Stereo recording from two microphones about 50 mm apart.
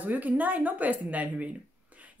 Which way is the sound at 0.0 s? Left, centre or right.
Right.